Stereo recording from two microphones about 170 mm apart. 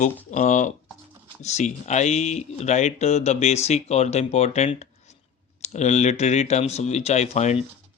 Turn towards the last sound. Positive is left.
turn(degrees=40)  # may be behind; listen again after turning